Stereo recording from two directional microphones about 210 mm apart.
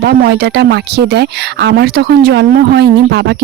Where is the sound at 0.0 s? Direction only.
50° right (ahead or behind).